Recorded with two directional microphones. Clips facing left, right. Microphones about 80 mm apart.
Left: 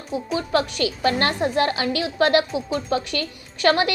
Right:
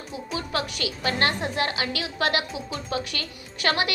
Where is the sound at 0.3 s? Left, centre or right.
Left.